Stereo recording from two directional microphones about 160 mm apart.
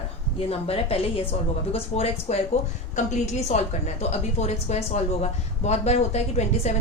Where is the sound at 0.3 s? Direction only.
40° left (ahead or behind).